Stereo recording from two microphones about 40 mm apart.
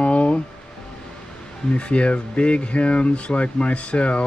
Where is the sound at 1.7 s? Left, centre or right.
Left.